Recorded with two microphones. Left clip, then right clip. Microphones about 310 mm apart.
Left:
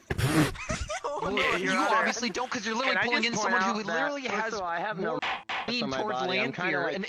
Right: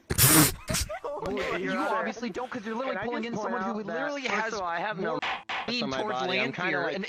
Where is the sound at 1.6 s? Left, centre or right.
Left.